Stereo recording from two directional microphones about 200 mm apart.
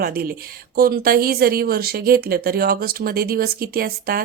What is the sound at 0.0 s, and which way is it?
A woman's voice, 50° right (ahead or behind).